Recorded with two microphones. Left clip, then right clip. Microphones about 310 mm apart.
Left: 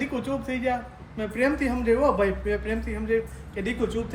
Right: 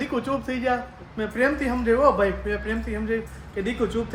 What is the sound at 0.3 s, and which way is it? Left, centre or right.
Speech, centre.